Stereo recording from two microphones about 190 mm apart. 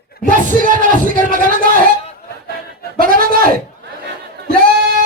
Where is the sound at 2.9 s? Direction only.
50° right (ahead or behind).